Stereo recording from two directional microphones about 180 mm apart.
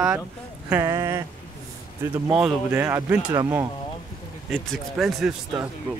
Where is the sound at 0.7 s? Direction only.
15° right (ahead or behind).